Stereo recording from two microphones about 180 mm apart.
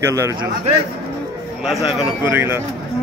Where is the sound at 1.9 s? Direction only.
10° right (ahead or behind).